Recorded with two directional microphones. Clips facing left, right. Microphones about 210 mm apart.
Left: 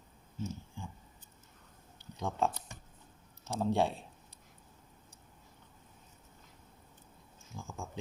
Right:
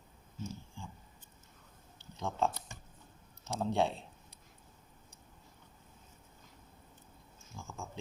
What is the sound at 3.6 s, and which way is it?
Speech, 10° left (ahead or behind).